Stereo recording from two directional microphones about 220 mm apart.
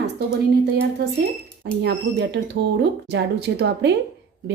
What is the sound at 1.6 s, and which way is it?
Speech, 50° right (ahead or behind).